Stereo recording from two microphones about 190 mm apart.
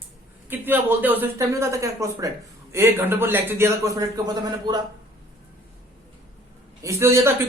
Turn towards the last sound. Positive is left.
turn(degrees=-15)  # may be behind; listen again after turning